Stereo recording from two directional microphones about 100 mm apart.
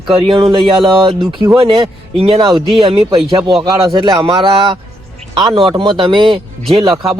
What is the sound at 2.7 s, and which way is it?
Speech, 80° right.